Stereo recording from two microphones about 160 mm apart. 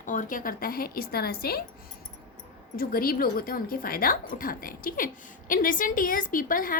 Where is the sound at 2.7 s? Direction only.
65° left (ahead or behind).